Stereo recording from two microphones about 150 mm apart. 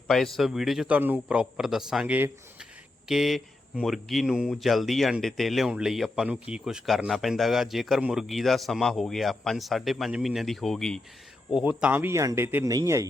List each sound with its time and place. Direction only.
0.1 s speech: centre (ahead or behind); by 13.1 s 20° right (ahead or behind)